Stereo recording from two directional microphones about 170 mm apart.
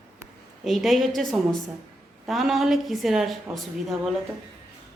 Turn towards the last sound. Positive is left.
turn(degrees=0)  # may be behind; listen again after turning